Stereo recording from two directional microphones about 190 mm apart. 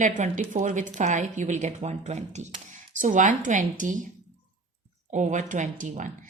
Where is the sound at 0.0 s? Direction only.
40° right (ahead or behind).